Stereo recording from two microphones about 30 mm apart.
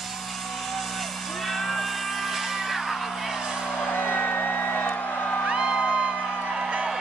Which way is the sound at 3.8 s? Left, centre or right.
Left.